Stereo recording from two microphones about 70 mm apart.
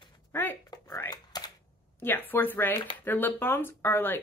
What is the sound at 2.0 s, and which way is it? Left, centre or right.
A woman's voice, left.